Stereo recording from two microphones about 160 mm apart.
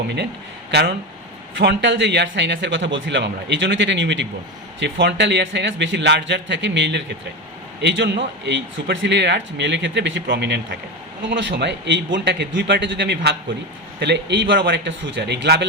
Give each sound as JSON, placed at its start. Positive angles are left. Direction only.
{"t": 0.7, "sound": "a man's voice", "side_deg": -90}